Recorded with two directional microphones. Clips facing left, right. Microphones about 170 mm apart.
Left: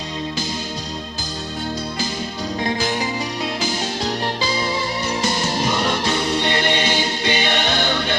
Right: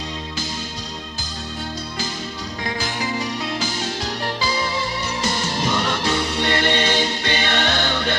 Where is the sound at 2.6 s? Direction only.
20° left (ahead or behind).